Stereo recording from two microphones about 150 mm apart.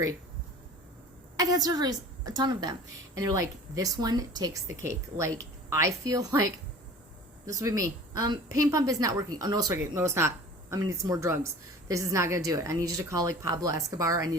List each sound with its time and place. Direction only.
1.4 s a woman's voice: 25° right (ahead or behind)
7.6 s a woman's voice: 20° right (ahead or behind)